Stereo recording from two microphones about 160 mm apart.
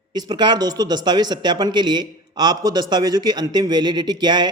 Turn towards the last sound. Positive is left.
turn(degrees=-25)  # may be behind; listen again after turning